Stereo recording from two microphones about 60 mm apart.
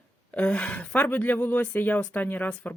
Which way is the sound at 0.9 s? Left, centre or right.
Left.